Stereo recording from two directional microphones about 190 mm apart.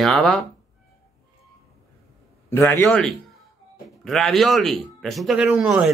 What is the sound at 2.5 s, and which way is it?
Speech, 15° left (ahead or behind).